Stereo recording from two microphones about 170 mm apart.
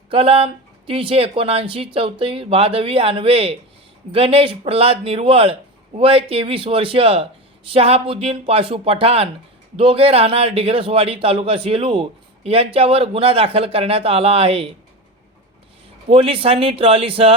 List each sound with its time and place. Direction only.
0.1 s a man's voice: 35° right (ahead or behind)
16.0 s a man's voice: 35° right (ahead or behind)